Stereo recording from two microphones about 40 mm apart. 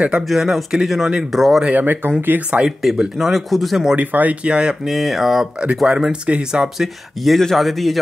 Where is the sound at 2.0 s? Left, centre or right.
Right.